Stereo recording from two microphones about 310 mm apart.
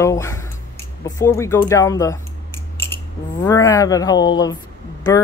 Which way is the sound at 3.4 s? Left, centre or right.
Centre.